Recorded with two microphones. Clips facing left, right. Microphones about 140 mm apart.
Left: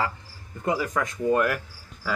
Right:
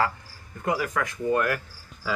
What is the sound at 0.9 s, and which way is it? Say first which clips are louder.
Speech: left 2 dB; 25° left (ahead or behind).